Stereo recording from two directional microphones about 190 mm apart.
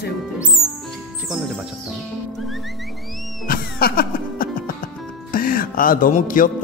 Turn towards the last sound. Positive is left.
turn(degrees=45)  # may be behind; listen again after turning